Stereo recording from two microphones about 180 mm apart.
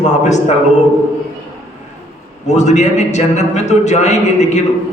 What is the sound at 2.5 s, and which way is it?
Speech, 40° left (ahead or behind).